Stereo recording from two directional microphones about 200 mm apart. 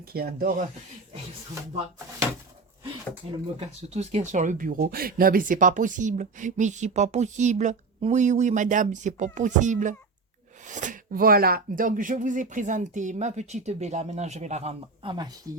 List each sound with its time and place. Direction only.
0.1 s speech: 50° right (ahead or behind)
3.2 s speech: 30° right (ahead or behind)